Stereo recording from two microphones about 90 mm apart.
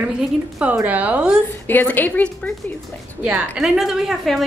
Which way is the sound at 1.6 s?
20° left (ahead or behind).